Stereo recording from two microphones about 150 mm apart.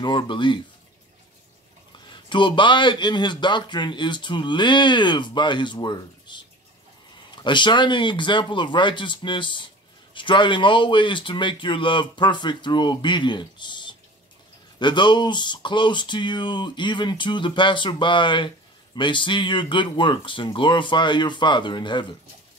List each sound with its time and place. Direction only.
0.0 s speech: 30° left (ahead or behind)
2.2 s speech: 35° left (ahead or behind)